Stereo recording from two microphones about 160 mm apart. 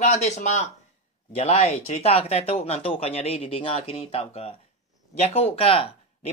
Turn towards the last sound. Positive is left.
turn(degrees=35)  # may be behind; listen again after turning